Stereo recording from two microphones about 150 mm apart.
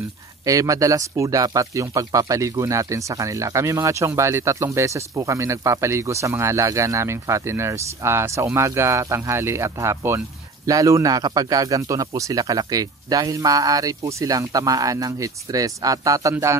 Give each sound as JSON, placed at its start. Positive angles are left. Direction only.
{"t": 0.5, "sound": "speech", "side_deg": -20}